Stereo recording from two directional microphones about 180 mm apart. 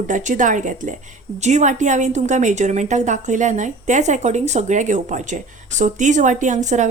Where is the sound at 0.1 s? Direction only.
45° right (ahead or behind).